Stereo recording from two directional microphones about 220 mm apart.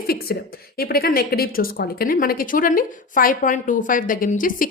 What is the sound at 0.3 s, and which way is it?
A woman's voice, 45° left (ahead or behind).